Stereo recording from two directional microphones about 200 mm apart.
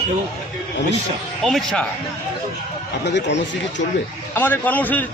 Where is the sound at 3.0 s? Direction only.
60° left (ahead or behind).